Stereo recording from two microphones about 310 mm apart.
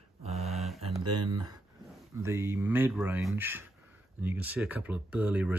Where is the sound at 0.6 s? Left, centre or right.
Centre.